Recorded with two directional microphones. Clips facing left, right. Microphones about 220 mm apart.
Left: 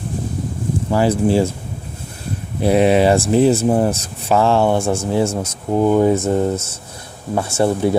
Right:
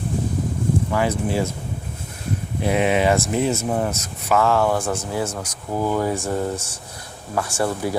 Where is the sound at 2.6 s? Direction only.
35° left (ahead or behind).